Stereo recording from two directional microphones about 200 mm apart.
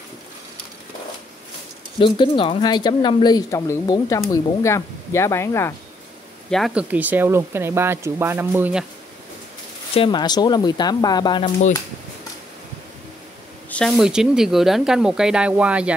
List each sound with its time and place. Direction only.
2.0 s speech: 25° left (ahead or behind)
6.5 s speech: 5° right (ahead or behind)
9.9 s speech: 25° left (ahead or behind)
13.7 s speech: 5° left (ahead or behind)